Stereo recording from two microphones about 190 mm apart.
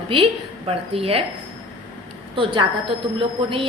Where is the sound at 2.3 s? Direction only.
25° right (ahead or behind).